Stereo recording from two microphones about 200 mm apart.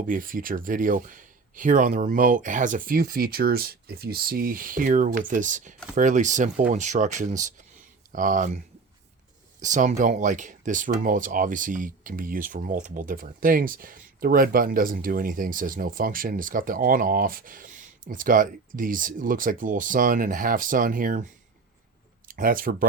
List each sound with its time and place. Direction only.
0.0 s speech: 45° right (ahead or behind)
22.3 s speech: 45° right (ahead or behind)